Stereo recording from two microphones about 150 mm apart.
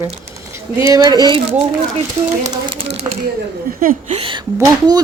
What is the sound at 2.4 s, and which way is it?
Speech, 25° right (ahead or behind).